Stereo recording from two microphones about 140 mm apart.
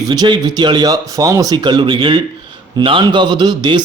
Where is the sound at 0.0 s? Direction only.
30° right (ahead or behind).